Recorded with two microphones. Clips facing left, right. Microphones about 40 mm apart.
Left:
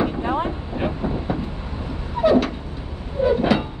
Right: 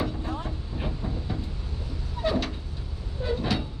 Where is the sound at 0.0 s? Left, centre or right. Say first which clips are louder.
Left 10 dB; left.